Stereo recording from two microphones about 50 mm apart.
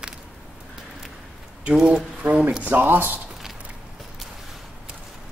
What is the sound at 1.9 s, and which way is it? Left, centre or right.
Speech, right.